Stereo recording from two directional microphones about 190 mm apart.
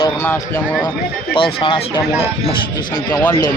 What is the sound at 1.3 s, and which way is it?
Speech, 25° left (ahead or behind).